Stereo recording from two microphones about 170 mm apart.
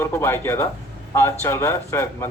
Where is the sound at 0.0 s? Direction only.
15° left (ahead or behind).